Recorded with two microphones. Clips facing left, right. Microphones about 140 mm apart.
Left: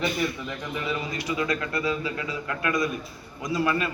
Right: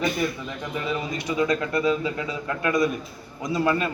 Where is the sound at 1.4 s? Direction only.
25° right (ahead or behind).